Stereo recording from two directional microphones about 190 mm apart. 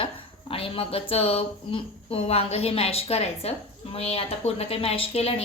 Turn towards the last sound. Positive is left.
turn(degrees=30)  # may be behind; listen again after turning